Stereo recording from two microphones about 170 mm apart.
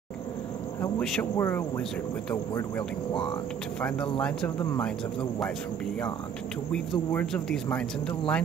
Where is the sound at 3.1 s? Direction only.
30° left (ahead or behind).